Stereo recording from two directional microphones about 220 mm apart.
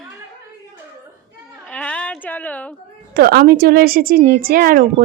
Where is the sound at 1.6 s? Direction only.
5° left (ahead or behind).